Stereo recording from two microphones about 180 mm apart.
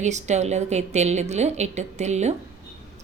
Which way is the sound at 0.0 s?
40° right (ahead or behind).